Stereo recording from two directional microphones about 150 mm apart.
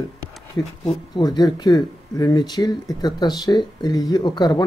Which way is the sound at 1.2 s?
25° left (ahead or behind).